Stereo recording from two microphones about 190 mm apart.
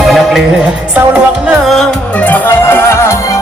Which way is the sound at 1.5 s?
Centre (ahead or behind).